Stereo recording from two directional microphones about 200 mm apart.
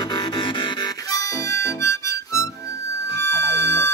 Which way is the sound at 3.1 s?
60° right (ahead or behind).